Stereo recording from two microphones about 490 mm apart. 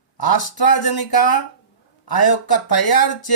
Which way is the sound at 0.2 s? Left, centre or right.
Left.